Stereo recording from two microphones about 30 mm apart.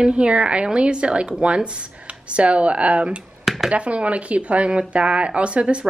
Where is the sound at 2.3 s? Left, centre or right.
Right.